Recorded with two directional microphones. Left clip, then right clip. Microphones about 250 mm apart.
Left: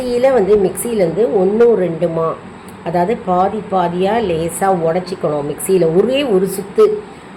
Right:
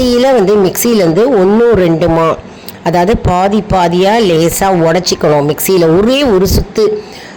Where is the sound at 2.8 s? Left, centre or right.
Right.